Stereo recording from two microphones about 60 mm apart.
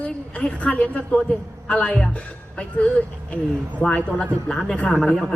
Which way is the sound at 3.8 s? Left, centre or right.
Left.